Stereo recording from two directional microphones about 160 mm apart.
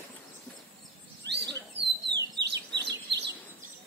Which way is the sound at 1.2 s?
90° right.